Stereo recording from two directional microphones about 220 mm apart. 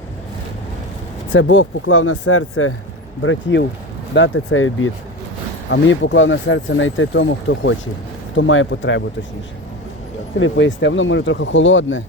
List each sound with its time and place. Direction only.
1.3 s speech: 60° left (ahead or behind)
3.2 s speech: 55° left (ahead or behind)
5.7 s speech: 55° left (ahead or behind)
10.4 s speech: 55° left (ahead or behind)